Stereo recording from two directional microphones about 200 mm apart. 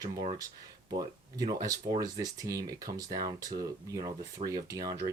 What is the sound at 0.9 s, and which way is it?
Speech, 20° right (ahead or behind).